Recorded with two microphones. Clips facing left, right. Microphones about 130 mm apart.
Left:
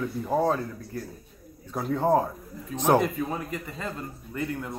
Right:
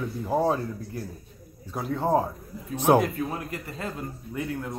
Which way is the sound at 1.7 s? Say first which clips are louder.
Left 2 dB; centre (ahead or behind).